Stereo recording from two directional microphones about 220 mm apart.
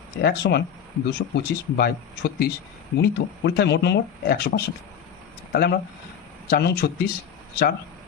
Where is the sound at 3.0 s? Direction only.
50° left (ahead or behind).